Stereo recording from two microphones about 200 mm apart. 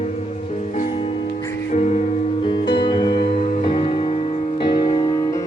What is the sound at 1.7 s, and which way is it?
Music, 35° left (ahead or behind).